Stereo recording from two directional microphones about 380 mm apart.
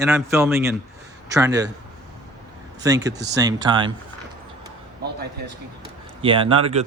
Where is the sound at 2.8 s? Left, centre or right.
Centre.